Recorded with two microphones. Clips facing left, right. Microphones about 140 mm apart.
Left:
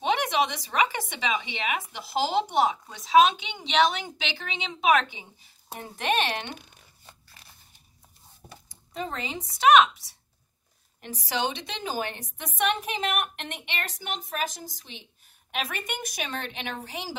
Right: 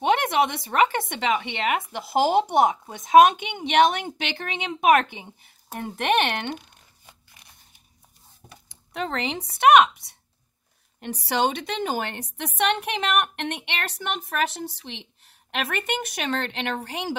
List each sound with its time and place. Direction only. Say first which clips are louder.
0.0 s speech: right 4 dB; 55° right (ahead or behind)
7.1 s biting: left 1 dB; 15° right (ahead or behind)
8.6 s a woman's voice: right 4 dB; 70° right (ahead or behind)